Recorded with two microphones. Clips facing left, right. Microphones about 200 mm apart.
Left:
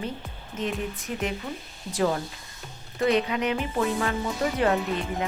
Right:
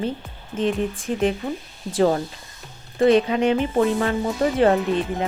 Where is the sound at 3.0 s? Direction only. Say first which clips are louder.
Right 7 dB; 30° right (ahead or behind).